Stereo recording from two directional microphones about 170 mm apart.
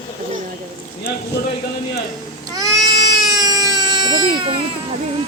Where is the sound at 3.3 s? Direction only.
20° right (ahead or behind).